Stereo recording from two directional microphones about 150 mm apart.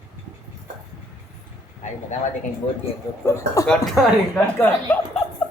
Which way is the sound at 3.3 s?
20° left (ahead or behind).